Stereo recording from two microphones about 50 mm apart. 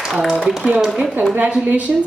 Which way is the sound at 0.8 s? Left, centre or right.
Centre.